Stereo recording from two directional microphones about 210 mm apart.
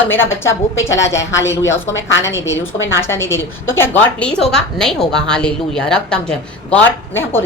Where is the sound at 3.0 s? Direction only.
10° left (ahead or behind).